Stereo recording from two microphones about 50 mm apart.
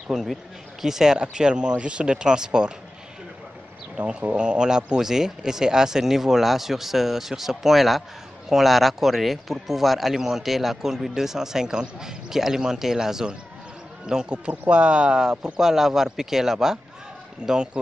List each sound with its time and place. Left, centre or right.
0.1 s speech: centre
3.9 s a man's voice: centre